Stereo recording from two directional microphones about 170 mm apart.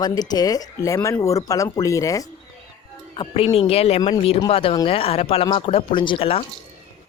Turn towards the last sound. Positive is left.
turn(degrees=35)  # may be behind; listen again after turning